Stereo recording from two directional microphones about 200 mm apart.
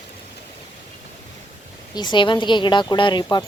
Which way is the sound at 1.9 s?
20° left (ahead or behind).